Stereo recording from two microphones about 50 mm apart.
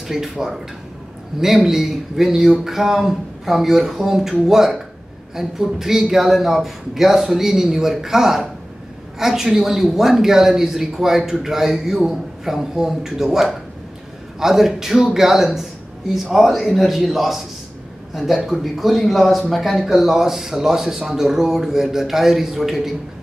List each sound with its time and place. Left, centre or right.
0.1 s speech: centre